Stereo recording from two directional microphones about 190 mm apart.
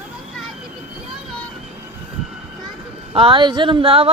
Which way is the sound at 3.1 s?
30° right (ahead or behind).